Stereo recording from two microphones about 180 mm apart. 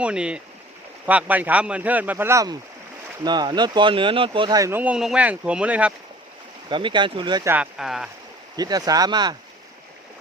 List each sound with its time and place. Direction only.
0.0 s speech: 5° right (ahead or behind)
6.7 s speech: 25° right (ahead or behind)
7.5 s speech: 5° right (ahead or behind)
8.5 s speech: 20° right (ahead or behind)